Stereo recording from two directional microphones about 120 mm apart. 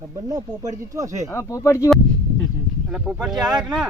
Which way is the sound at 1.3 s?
25° left (ahead or behind).